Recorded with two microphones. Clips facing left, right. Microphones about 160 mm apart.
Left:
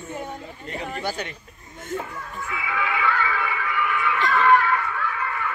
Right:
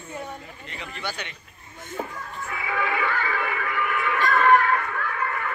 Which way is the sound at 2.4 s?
45° right (ahead or behind).